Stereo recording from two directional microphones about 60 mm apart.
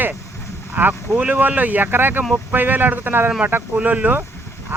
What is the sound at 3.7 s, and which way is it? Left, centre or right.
Speech, right.